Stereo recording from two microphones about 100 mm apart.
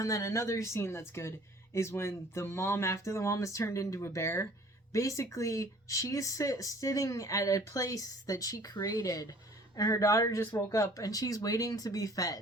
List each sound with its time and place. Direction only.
0.0 s speech: 30° left (ahead or behind)